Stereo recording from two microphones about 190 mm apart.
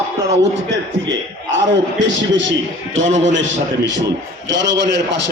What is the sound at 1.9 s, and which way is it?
A man's voice, 75° right (ahead or behind).